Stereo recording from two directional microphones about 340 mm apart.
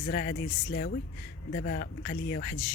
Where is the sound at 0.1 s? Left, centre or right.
Left.